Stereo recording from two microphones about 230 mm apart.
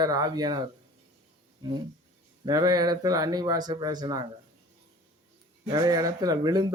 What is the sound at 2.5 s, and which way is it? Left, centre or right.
Speech, centre.